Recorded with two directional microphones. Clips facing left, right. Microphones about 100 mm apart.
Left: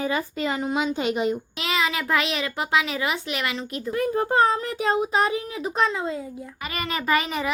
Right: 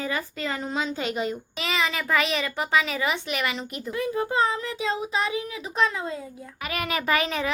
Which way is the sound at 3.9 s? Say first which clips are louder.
Left 4 dB; 45° left (ahead or behind).